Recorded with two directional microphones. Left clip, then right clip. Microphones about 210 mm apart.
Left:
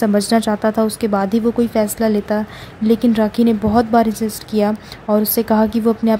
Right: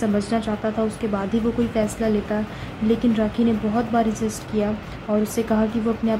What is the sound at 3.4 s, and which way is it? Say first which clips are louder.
A woman's voice: left 7 dB; 40° left (ahead or behind).